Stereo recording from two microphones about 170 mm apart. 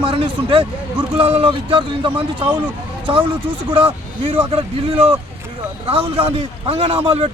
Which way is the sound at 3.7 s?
30° right (ahead or behind).